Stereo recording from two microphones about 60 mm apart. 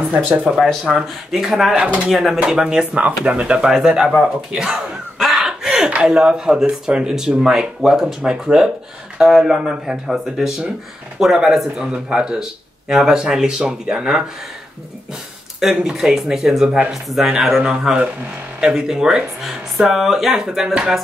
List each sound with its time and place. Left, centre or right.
0.3 s speech: centre
0.6 s speech: centre
1.8 s speech: right
2.0 s speech: centre
2.4 s speech: centre
5.2 s snicker: centre
5.5 s chuckle: centre
5.9 s speech: centre
15.6 s speech: centre